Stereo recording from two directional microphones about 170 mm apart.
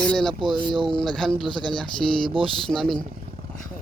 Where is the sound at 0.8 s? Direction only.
Centre (ahead or behind).